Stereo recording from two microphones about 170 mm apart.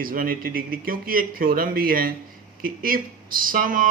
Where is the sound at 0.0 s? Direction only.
55° right (ahead or behind).